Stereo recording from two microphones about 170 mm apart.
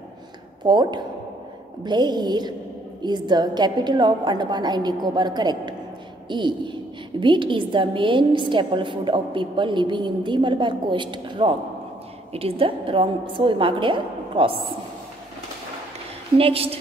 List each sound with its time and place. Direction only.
0.7 s a woman's voice: 25° right (ahead or behind)
16.3 s a woman's voice: 35° right (ahead or behind)